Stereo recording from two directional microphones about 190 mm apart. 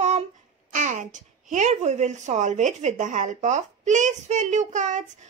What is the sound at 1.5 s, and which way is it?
A woman's voice, 35° right (ahead or behind).